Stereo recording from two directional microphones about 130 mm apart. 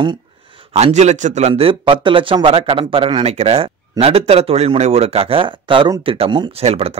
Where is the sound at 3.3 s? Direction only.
50° right (ahead or behind).